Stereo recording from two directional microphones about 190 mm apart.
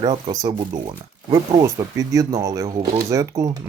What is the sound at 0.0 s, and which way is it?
Speech, 20° right (ahead or behind).